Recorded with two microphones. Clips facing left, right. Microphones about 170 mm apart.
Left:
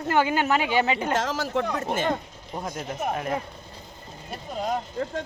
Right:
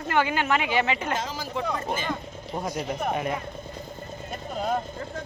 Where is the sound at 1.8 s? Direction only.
65° left (ahead or behind).